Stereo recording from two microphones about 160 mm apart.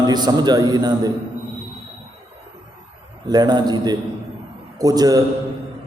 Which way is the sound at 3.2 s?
25° right (ahead or behind).